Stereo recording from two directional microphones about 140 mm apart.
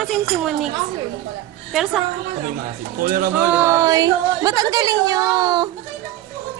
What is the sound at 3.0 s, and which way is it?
Speech, 90° right.